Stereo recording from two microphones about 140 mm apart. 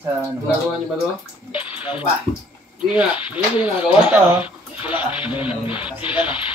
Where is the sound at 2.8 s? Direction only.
10° right (ahead or behind).